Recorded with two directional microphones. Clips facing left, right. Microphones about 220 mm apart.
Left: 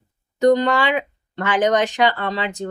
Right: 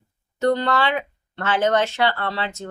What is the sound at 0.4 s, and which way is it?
A woman's voice, 15° left (ahead or behind).